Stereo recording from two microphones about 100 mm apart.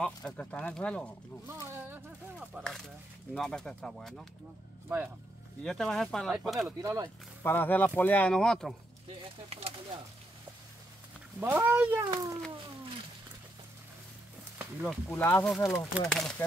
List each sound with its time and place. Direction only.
0.0 s speech: 10° left (ahead or behind)
1.5 s speech: 25° right (ahead or behind)
2.6 s speech: 5° left (ahead or behind)
4.8 s speech: 15° right (ahead or behind)
5.6 s speech: 5° left (ahead or behind)
6.8 s speech: 30° right (ahead or behind)
7.4 s speech: 20° left (ahead or behind)
8.3 s speech: 5° left (ahead or behind)
9.2 s speech: 75° right (ahead or behind)
11.3 s speech: 20° right (ahead or behind)
12.0 s a child's voice: 45° right (ahead or behind)
14.8 s speech: centre (ahead or behind)
15.6 s speech: 30° left (ahead or behind)
16.1 s speech: 5° left (ahead or behind)